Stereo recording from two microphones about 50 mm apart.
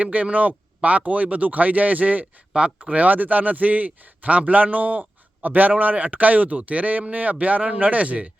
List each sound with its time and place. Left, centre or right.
0.0 s a man's voice: right
2.5 s speech: centre
2.9 s a man's voice: right